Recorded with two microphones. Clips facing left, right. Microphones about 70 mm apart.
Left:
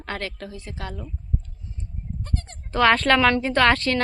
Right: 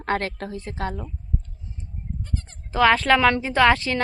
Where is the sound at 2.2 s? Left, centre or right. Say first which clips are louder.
Left 2 dB; left.